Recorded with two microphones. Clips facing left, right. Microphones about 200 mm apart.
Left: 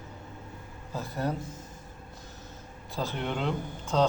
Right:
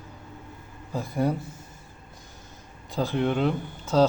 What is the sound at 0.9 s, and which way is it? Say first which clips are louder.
Speech: right 6 dB; 10° right (ahead or behind).